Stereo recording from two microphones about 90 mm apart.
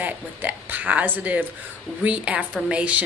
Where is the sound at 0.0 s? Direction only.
20° right (ahead or behind).